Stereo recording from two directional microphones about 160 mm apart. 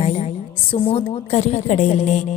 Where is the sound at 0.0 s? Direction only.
40° left (ahead or behind).